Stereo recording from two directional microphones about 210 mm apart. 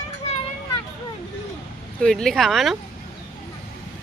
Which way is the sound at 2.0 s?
5° left (ahead or behind).